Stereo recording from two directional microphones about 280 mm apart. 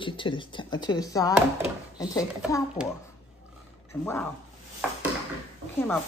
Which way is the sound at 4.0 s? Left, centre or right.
Centre.